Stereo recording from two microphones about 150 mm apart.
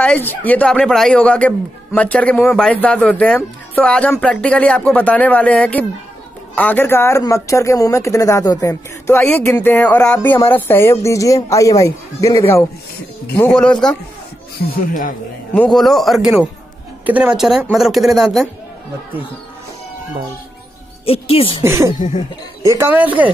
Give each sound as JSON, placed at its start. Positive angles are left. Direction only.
{"t": 0.0, "sound": "a woman's voice", "side_deg": 10}
{"t": 13.4, "sound": "a man's voice", "side_deg": 5}
{"t": 14.7, "sound": "speech", "side_deg": 65}
{"t": 15.5, "sound": "a man's voice", "side_deg": 5}
{"t": 21.0, "sound": "speech", "side_deg": 40}
{"t": 21.6, "sound": "a woman's voice", "side_deg": -20}